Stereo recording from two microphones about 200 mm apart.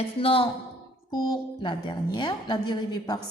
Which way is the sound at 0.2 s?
30° left (ahead or behind).